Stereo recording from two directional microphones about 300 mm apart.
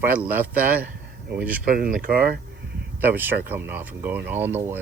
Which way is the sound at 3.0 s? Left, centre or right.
Centre.